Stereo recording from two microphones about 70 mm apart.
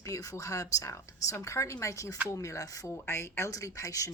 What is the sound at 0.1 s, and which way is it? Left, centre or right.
Speech, left.